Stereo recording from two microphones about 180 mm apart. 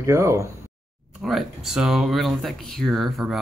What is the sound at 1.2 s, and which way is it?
Speech, centre (ahead or behind).